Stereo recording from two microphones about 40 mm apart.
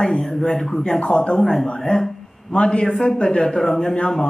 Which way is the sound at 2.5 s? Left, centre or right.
Left.